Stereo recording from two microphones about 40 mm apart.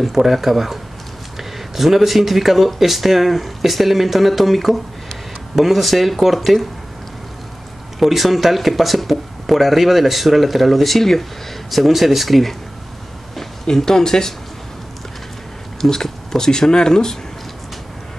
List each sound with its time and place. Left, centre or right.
0.0 s speech: centre
1.8 s speech: centre
8.0 s speech: centre
15.8 s speech: centre